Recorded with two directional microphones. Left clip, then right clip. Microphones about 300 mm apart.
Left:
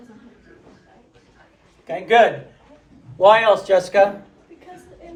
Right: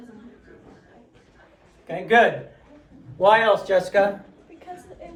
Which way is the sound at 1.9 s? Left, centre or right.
Left.